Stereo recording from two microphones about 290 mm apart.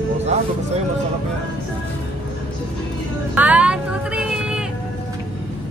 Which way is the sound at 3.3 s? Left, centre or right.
Centre.